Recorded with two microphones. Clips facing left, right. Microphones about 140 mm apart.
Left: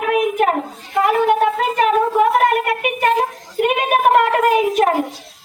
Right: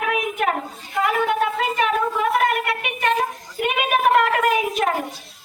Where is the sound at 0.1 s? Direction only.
45° left (ahead or behind).